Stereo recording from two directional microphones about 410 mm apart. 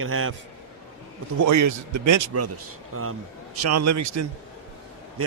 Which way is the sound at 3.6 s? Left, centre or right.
Right.